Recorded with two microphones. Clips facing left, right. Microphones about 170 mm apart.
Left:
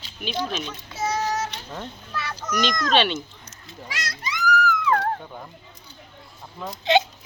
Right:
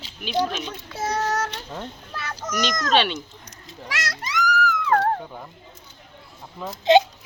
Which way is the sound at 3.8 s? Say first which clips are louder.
Right 2 dB; 80° right.